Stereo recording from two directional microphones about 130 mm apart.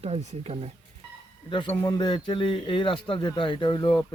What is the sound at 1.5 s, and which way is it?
Speech, 40° left (ahead or behind).